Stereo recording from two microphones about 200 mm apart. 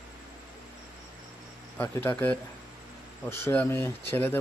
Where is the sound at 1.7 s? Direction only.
10° left (ahead or behind).